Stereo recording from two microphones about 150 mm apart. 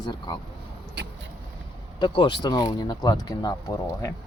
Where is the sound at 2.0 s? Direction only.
30° left (ahead or behind).